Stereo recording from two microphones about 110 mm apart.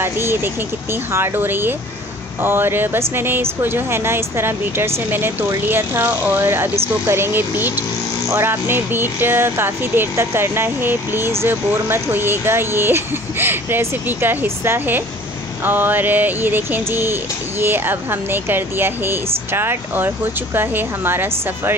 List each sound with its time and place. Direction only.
0.0 s speech: 20° right (ahead or behind)